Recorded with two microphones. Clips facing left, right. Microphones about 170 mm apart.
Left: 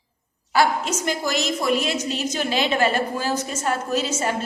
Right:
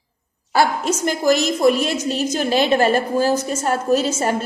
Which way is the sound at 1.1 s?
45° right (ahead or behind).